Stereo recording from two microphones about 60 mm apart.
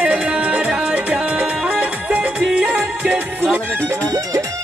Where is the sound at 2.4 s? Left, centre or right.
Centre.